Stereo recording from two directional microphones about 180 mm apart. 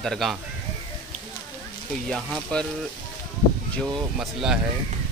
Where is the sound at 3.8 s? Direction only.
5° right (ahead or behind).